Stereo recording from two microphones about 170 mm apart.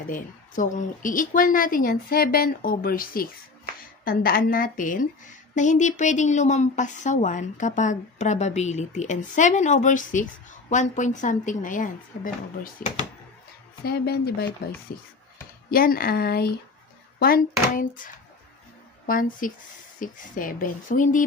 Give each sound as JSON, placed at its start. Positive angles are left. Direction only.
{"t": 0.1, "sound": "a woman's voice", "side_deg": 50}
{"t": 12.8, "sound": "speech", "side_deg": 10}
{"t": 13.8, "sound": "speech", "side_deg": 70}
{"t": 15.7, "sound": "a woman's voice", "side_deg": 60}
{"t": 17.2, "sound": "a woman's voice", "side_deg": 55}